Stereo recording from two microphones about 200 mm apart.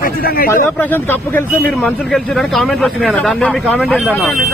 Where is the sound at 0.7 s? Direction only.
10° left (ahead or behind).